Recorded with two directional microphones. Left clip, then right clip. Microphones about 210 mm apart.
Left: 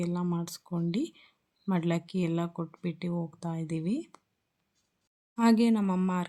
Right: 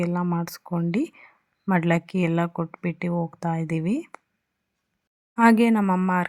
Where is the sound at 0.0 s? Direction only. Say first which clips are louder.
Right 7 dB; 20° right (ahead or behind).